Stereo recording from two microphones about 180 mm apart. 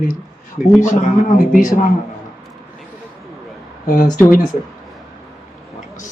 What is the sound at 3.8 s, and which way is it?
Speech, 50° left (ahead or behind).